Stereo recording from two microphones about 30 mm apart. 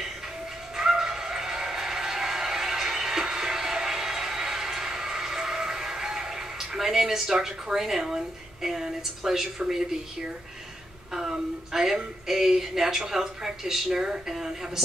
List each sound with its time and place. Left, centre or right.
0.7 s bow-wow: centre
7.6 s speech: centre
11.1 s a sound: centre
12.3 s speech: centre